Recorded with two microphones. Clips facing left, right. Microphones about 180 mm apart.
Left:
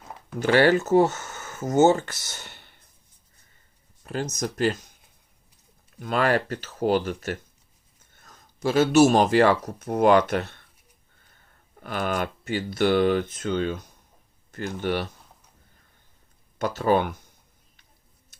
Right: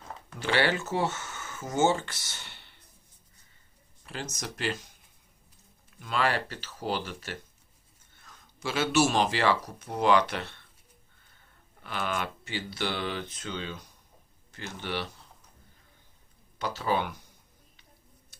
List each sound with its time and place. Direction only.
0.0 s a sound: 10° left (ahead or behind)
0.3 s speech: 45° left (ahead or behind)
4.0 s speech: 45° left (ahead or behind)
6.0 s speech: 50° left (ahead or behind)
11.8 s speech: 45° left (ahead or behind)
16.6 s speech: 50° left (ahead or behind)